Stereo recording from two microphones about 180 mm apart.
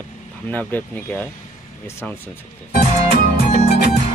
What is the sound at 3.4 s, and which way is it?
Music, 40° left (ahead or behind).